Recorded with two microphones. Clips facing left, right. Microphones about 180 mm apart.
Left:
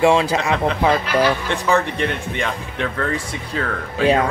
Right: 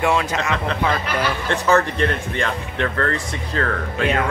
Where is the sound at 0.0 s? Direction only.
30° left (ahead or behind).